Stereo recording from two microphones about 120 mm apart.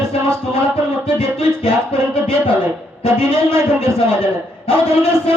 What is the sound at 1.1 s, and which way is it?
Speech, 55° left (ahead or behind).